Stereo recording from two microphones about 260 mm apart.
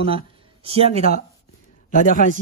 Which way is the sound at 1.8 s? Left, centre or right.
Left.